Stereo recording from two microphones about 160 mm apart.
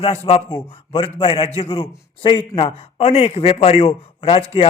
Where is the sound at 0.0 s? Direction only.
40° left (ahead or behind).